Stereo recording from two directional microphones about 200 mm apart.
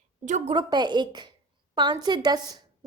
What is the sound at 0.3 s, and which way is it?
Speech, 35° right (ahead or behind).